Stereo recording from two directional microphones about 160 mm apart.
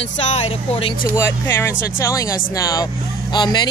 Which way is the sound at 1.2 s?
15° left (ahead or behind).